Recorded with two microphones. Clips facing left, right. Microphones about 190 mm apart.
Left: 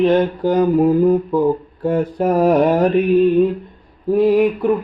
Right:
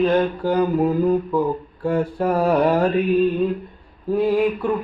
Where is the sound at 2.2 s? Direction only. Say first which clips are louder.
Left 5 dB; 20° left (ahead or behind).